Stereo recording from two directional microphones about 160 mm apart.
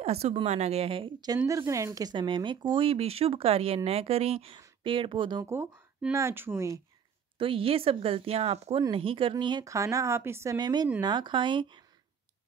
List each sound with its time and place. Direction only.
0.0 s speech: 40° right (ahead or behind)
5.4 s speech: 15° right (ahead or behind)
7.3 s speech: 35° right (ahead or behind)